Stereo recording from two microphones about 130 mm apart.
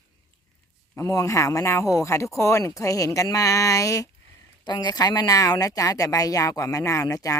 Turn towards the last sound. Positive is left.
turn(degrees=25)  # may be behind; listen again after turning